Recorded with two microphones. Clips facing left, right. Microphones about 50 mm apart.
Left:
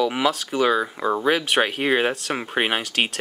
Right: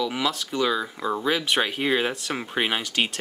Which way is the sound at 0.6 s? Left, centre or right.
Left.